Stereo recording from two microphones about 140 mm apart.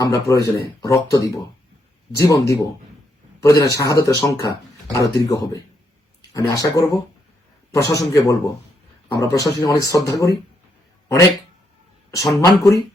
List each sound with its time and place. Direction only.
0.0 s speech: 25° left (ahead or behind)
12.1 s speech: 25° left (ahead or behind)